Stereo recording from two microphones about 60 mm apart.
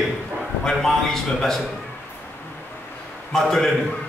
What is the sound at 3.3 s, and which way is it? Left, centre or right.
Speech, centre.